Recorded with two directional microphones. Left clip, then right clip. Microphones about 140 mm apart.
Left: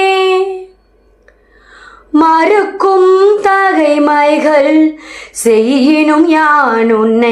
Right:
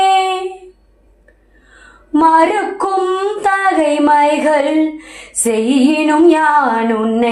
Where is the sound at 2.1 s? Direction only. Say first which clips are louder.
Left 2 dB; 30° left (ahead or behind).